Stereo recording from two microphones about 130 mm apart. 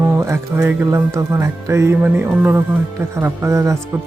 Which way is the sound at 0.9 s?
20° right (ahead or behind).